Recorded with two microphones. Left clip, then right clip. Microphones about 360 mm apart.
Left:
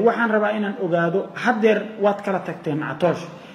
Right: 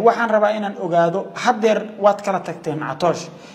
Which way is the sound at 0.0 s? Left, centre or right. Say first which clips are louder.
Right 3 dB; right.